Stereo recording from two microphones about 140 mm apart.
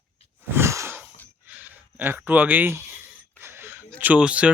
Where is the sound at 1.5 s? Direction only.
10° right (ahead or behind).